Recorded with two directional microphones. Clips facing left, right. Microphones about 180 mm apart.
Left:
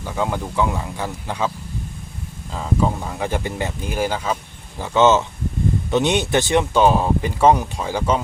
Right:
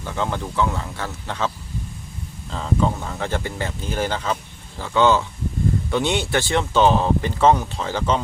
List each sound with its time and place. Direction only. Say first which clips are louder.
0.0 s speech: left 2 dB; 10° left (ahead or behind)
2.5 s speech: left 1 dB; 10° left (ahead or behind)
4.8 s speech: left 2 dB; 20° left (ahead or behind)